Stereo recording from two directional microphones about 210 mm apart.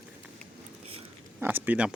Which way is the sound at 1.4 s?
10° right (ahead or behind).